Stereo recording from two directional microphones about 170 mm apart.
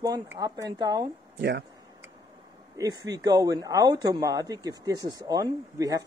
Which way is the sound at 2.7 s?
25° right (ahead or behind).